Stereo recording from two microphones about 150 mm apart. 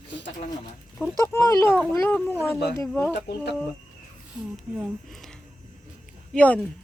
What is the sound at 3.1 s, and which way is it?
Speech, 90° left.